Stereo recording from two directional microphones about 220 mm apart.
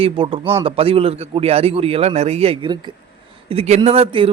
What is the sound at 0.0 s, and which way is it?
Speech, 25° right (ahead or behind).